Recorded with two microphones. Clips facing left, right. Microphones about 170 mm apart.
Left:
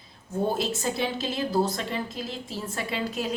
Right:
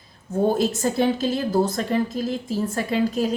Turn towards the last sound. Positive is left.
turn(degrees=-40)  # may be behind; listen again after turning